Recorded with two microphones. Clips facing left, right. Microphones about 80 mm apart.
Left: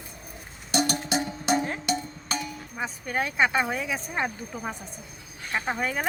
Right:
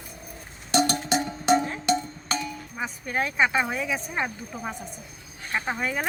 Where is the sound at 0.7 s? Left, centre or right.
Right.